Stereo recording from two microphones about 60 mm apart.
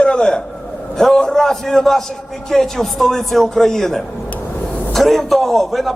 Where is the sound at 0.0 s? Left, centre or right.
Centre.